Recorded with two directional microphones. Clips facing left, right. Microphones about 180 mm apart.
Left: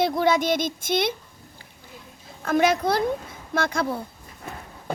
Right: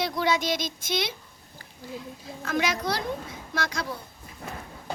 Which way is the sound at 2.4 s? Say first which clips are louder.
Left 7 dB; 50° left (ahead or behind).